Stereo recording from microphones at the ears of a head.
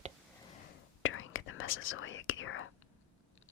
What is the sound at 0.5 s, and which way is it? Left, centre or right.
Whispering, left.